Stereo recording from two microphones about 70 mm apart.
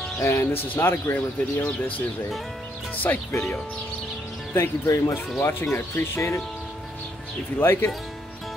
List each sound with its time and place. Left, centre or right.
0.2 s speech: left
3.0 s speech: left
4.8 s speech: left
5.4 s speech: left
7.5 s speech: left